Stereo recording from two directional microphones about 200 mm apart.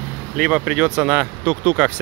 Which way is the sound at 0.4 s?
5° right (ahead or behind).